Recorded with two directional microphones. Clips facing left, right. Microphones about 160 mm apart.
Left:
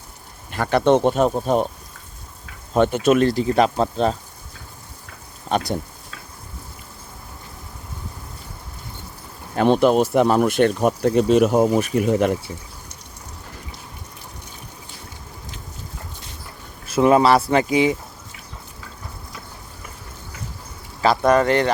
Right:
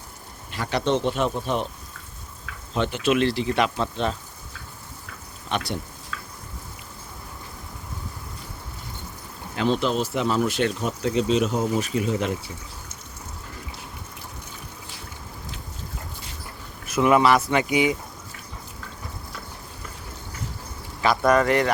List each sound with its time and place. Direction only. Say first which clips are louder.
0.5 s speech: left 7 dB; 50° left (ahead or behind)
2.7 s speech: left 6 dB; 50° left (ahead or behind)
5.5 s a sound: left 6 dB; 40° left (ahead or behind)
9.6 s speech: left 7 dB; 55° left (ahead or behind)
16.8 s speech: left 3 dB; 30° left (ahead or behind)
21.2 s speech: left 2 dB; 25° left (ahead or behind)